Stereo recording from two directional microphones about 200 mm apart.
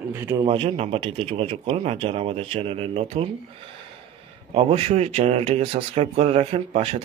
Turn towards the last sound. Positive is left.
turn(degrees=-30)  # may be behind; listen again after turning